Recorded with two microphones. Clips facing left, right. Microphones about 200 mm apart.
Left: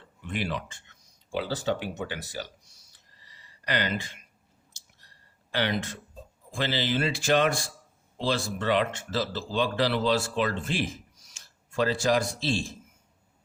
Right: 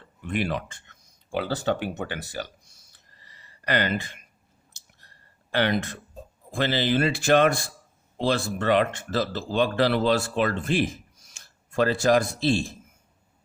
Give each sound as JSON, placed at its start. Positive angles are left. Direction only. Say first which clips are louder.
{"t": 0.2, "sound": "speech", "louder": "right 4 dB", "side_deg": -55}
{"t": 2.9, "sound": "a sound", "louder": "right 3 dB", "side_deg": -55}
{"t": 6.5, "sound": "speech", "louder": "right 4 dB", "side_deg": -55}